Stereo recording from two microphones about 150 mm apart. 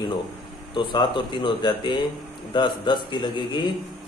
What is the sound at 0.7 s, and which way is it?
Speech, 30° left (ahead or behind).